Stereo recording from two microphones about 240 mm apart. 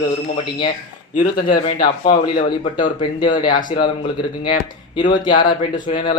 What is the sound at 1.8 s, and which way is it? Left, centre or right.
Speech, centre.